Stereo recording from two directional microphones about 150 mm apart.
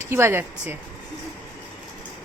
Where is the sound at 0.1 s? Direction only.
15° right (ahead or behind).